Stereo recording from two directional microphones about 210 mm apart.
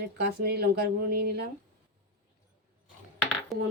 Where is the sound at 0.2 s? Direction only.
50° right (ahead or behind).